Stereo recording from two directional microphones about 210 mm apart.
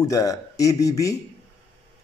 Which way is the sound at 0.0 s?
15° left (ahead or behind).